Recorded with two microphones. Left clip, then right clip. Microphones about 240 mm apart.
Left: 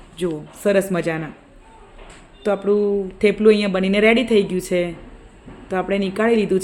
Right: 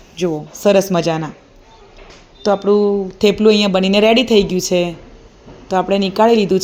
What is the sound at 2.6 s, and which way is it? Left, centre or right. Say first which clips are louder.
A woman's voice: right 3 dB; centre.